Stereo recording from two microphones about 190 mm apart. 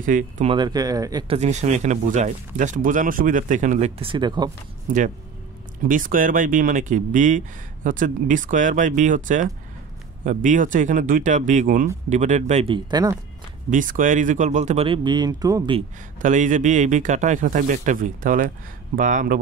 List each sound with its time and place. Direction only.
0.0 s speech: 45° right (ahead or behind)
0.5 s speech: 20° right (ahead or behind)
4.9 s speech: 45° right (ahead or behind); by 13.2 s 20° right (ahead or behind)
13.7 s speech: 45° right (ahead or behind); by 15.8 s 20° right (ahead or behind)
16.2 s speech: 40° right (ahead or behind)